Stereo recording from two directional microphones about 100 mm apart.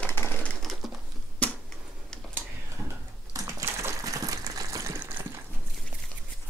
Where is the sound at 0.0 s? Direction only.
20° left (ahead or behind).